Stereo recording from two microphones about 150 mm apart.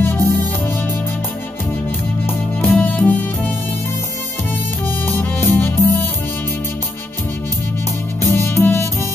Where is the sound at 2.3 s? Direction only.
15° left (ahead or behind).